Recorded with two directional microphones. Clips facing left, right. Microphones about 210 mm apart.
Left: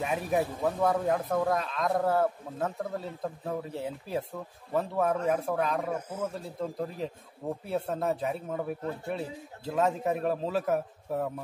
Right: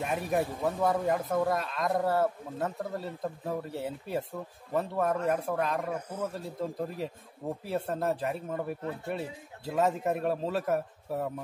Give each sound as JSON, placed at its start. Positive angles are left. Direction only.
{"t": 0.0, "sound": "speech", "side_deg": 0}